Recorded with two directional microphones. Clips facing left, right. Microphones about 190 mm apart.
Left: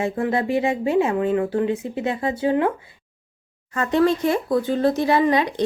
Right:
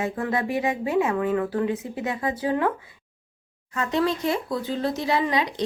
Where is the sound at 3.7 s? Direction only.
50° left (ahead or behind).